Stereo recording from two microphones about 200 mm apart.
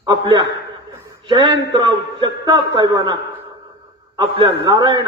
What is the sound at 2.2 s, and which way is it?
Speech, 25° right (ahead or behind).